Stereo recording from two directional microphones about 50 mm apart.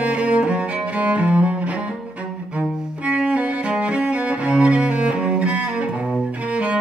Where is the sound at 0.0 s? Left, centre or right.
Right.